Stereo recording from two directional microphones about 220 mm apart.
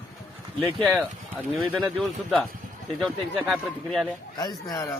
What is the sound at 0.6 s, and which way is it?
Speech, 10° right (ahead or behind).